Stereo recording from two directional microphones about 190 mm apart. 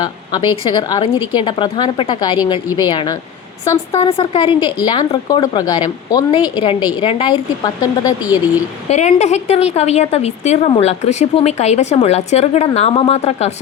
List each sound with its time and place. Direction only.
0.0 s speech: 20° left (ahead or behind)
4.2 s speech: 30° left (ahead or behind)
8.9 s a woman's voice: 35° left (ahead or behind)